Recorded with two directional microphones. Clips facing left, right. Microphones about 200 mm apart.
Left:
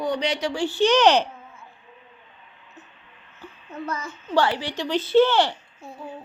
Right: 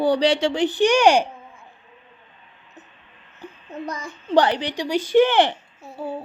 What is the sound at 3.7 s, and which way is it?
A woman's voice, 15° right (ahead or behind).